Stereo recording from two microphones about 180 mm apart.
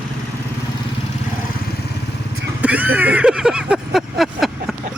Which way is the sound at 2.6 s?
10° right (ahead or behind).